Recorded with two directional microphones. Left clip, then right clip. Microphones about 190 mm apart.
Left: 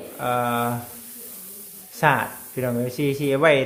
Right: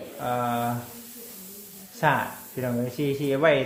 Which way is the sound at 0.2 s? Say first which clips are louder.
Left 4 dB; 35° left (ahead or behind).